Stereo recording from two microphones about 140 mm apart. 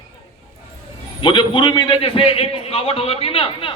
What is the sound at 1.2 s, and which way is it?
A man's voice, 35° left (ahead or behind).